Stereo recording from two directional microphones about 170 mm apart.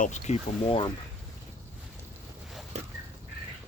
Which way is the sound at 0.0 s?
40° left (ahead or behind).